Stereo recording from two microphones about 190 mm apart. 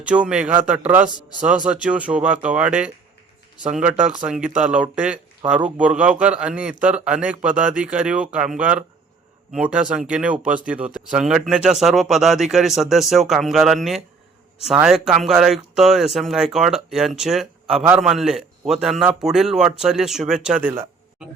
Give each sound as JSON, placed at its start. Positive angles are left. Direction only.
{"t": 0.0, "sound": "speech", "side_deg": -5}